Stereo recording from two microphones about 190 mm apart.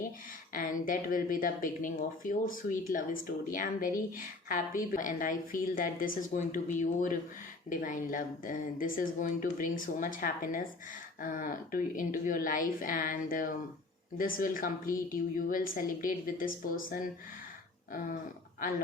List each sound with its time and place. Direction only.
0.5 s speech: 45° left (ahead or behind)